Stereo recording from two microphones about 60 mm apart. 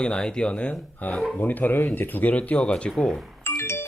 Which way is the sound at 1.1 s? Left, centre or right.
Centre.